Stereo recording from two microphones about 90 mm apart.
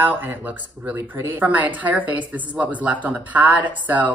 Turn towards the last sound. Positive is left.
turn(degrees=-20)  # may be behind; listen again after turning